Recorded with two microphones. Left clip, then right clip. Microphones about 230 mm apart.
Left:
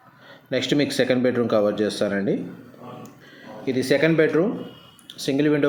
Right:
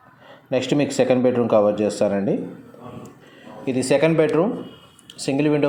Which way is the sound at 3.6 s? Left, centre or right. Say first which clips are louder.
Right 2 dB; centre.